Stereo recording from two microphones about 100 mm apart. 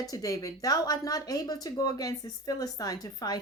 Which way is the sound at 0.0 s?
35° left (ahead or behind).